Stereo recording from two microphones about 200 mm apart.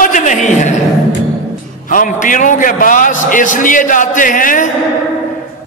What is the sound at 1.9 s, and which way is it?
A man's voice, 40° left (ahead or behind).